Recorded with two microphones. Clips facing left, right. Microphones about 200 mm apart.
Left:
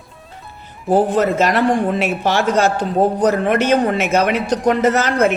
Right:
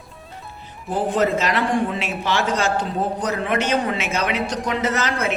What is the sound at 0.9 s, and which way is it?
A man's voice, 50° left (ahead or behind).